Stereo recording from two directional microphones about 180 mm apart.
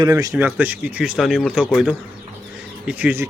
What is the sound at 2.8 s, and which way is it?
Speech, 10° right (ahead or behind).